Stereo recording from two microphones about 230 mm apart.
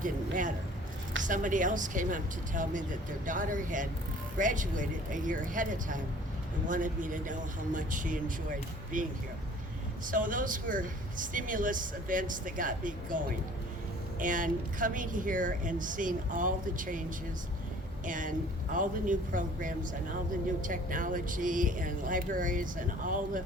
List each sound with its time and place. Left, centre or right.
0.0 s speech: right
18.0 s speech: right